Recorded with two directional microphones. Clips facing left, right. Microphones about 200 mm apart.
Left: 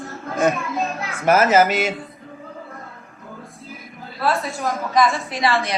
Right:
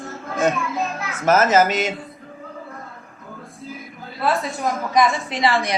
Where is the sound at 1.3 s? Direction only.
10° left (ahead or behind).